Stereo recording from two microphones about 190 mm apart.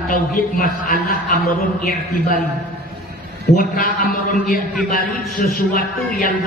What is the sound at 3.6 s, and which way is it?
A man's voice, 50° left (ahead or behind).